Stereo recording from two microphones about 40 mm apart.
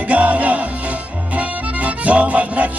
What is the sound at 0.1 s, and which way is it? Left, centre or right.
Music, right.